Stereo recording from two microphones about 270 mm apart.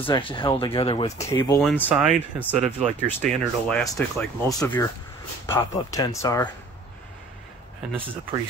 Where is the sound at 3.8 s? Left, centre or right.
Centre.